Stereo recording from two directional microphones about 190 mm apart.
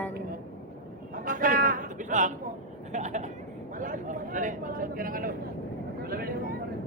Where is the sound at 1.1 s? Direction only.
45° right (ahead or behind).